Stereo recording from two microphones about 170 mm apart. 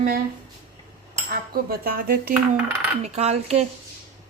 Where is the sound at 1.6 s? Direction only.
60° right (ahead or behind).